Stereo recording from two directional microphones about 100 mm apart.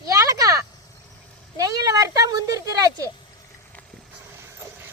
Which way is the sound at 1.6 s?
35° right (ahead or behind).